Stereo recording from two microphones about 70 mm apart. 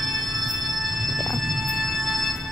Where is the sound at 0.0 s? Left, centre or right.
Centre.